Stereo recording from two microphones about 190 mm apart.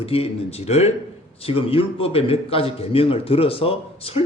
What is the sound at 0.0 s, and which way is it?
A man's voice, 30° left (ahead or behind).